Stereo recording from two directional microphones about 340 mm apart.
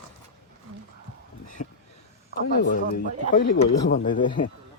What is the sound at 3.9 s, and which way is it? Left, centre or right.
Speech, left.